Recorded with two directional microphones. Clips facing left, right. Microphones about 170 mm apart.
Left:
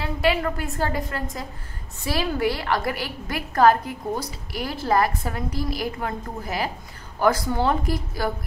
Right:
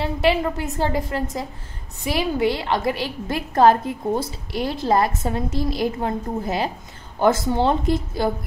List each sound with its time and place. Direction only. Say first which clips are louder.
0.0 s a woman's voice: right 3 dB; 25° right (ahead or behind)